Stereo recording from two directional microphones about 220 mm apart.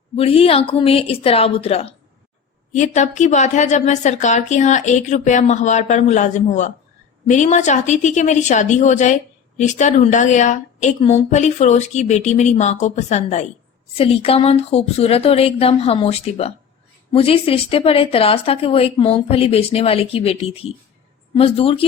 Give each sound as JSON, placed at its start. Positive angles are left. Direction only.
{"t": 0.2, "sound": "a woman's voice", "side_deg": 25}